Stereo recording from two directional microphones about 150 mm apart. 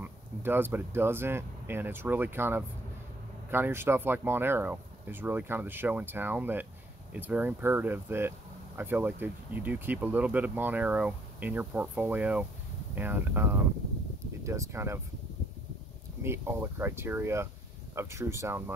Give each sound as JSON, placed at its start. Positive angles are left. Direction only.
{"t": 0.0, "sound": "speech", "side_deg": -15}
{"t": 16.2, "sound": "speech", "side_deg": -15}